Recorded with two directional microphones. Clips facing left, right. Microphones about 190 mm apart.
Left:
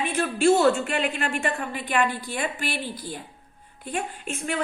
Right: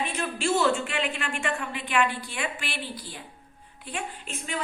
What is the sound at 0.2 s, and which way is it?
A woman's voice, 55° left (ahead or behind).